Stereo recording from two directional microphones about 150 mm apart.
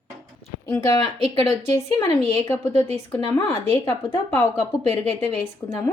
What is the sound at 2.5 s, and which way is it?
A woman's voice, 15° left (ahead or behind).